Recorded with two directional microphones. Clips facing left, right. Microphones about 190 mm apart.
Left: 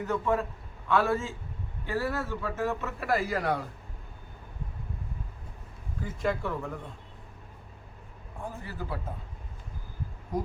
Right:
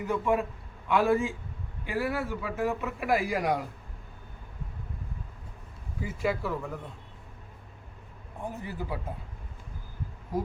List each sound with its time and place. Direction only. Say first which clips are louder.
0.0 s speech: right 1 dB; 10° right (ahead or behind)
6.0 s speech: even; 5° right (ahead or behind)
8.4 s speech: right 2 dB; 15° right (ahead or behind)
10.3 s speech: right 1 dB; 5° right (ahead or behind)